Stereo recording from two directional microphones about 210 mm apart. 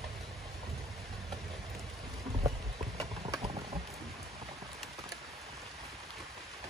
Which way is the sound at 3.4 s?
30° right (ahead or behind).